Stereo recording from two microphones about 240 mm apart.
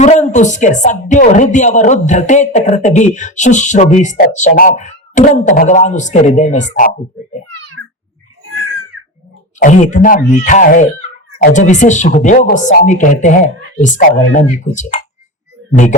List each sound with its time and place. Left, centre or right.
0.0 s a woman's voice: left
9.6 s a woman's voice: left